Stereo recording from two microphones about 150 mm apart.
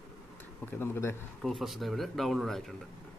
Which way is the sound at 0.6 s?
15° left (ahead or behind).